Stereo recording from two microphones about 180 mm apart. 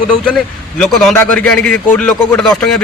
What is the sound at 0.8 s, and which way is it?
A man's voice, 5° left (ahead or behind).